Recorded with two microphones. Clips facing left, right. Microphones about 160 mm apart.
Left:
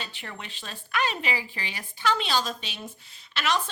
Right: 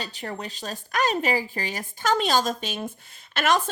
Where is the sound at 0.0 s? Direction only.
40° right (ahead or behind).